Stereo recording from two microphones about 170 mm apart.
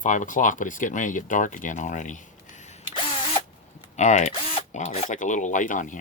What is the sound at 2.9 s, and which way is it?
Drill, 30° left (ahead or behind).